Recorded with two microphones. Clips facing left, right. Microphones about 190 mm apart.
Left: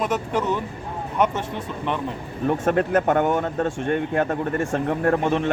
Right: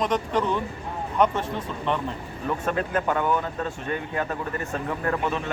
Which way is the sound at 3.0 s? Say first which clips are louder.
Left 5 dB; 65° left (ahead or behind).